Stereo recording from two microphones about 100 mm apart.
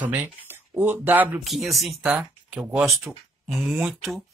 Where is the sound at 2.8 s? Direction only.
Centre (ahead or behind).